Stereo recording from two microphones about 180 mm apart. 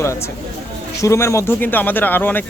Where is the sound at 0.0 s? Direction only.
15° left (ahead or behind).